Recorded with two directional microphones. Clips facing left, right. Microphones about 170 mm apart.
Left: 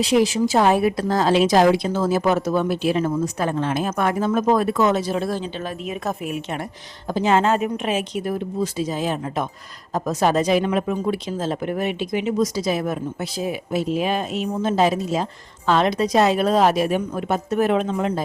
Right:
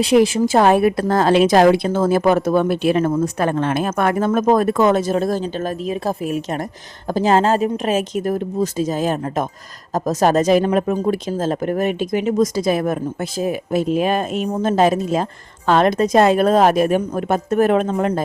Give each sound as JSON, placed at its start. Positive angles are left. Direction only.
{"t": 0.0, "sound": "speech", "side_deg": -55}